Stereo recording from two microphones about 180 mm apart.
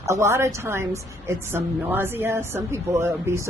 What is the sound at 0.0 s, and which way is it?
Speech, 15° right (ahead or behind).